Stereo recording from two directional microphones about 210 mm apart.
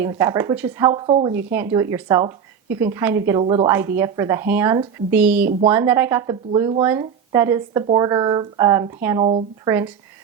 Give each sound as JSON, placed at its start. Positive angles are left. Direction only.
{"t": 0.0, "sound": "a woman's voice", "side_deg": -15}
{"t": 1.5, "sound": "a woman's voice", "side_deg": -10}
{"t": 3.4, "sound": "a woman's voice", "side_deg": -25}
{"t": 3.7, "sound": "a woman's voice", "side_deg": -10}